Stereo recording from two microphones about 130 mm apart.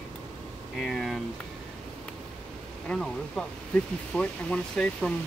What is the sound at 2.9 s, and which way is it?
Speech, 5° left (ahead or behind).